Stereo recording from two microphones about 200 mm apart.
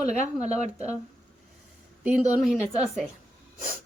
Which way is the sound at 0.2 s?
35° right (ahead or behind).